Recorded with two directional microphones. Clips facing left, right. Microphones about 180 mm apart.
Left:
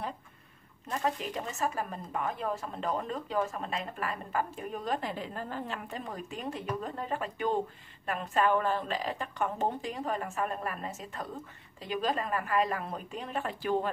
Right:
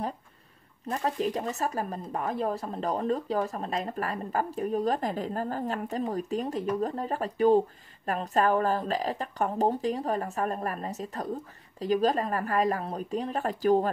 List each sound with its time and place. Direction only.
0.8 s speech: 40° right (ahead or behind)